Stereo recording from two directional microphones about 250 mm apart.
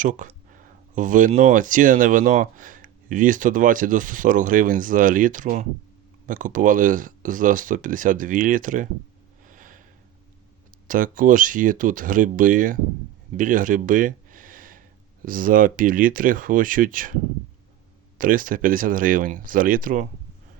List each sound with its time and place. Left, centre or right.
0.0 s speech: right
9.5 s a sound: right
10.8 s speech: right
18.2 s speech: right